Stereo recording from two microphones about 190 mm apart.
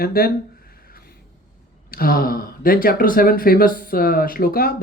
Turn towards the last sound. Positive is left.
turn(degrees=50)  # may be behind; listen again after turning